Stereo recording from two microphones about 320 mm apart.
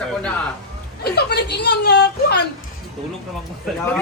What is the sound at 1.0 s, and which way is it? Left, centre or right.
Speech, left.